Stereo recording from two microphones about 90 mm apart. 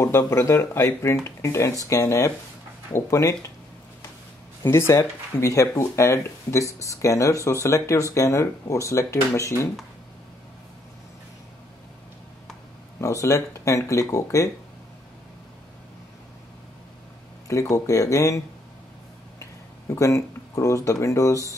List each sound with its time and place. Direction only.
0.3 s speech: 35° left (ahead or behind)
4.6 s speech: 30° left (ahead or behind)
13.0 s speech: 35° left (ahead or behind)
17.5 s speech: 35° left (ahead or behind)
19.9 s speech: 35° left (ahead or behind)